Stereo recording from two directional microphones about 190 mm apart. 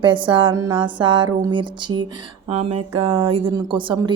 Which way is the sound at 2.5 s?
35° right (ahead or behind).